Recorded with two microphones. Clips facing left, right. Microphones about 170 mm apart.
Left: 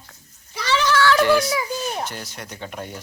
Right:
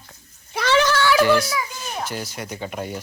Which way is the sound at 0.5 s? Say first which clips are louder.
Right 3 dB; 55° right (ahead or behind).